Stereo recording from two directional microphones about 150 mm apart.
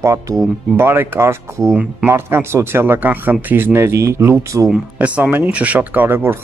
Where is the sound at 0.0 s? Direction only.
20° right (ahead or behind).